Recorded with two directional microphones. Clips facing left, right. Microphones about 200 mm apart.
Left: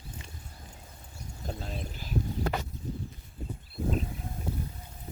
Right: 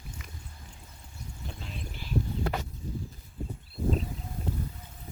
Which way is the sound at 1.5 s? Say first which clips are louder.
Left 6 dB; 40° left (ahead or behind).